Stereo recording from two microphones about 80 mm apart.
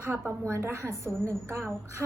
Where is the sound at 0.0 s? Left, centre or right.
Right.